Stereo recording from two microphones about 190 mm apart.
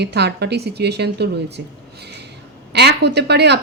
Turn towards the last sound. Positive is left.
turn(degrees=-60)  # may be behind; listen again after turning